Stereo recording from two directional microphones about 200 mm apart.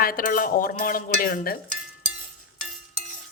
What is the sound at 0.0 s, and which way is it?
Cutlery, 45° left (ahead or behind).